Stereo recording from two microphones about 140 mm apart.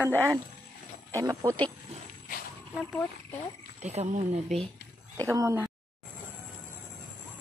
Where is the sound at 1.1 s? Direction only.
20° right (ahead or behind).